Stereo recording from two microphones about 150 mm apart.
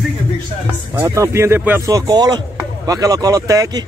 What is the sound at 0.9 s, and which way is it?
Speech, 20° right (ahead or behind).